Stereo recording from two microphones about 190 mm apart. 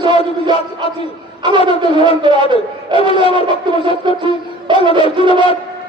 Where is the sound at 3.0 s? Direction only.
30° left (ahead or behind).